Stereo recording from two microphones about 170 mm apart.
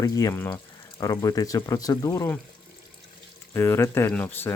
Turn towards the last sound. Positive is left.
turn(degrees=10)  # may be behind; listen again after turning